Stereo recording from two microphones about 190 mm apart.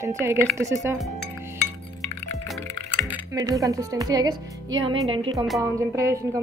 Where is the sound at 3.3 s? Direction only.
20° right (ahead or behind).